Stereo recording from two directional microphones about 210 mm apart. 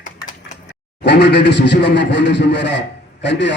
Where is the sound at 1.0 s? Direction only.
55° left (ahead or behind).